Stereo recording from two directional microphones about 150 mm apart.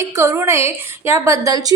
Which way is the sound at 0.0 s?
20° right (ahead or behind).